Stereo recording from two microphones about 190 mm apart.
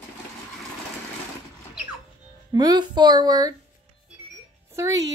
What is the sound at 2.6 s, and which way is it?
Speech, 25° right (ahead or behind).